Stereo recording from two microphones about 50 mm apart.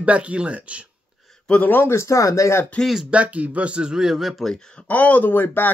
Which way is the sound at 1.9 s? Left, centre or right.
Left.